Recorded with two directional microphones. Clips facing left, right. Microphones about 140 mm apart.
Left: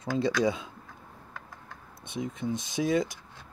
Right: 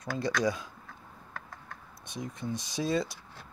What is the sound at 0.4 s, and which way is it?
Speech, 25° left (ahead or behind).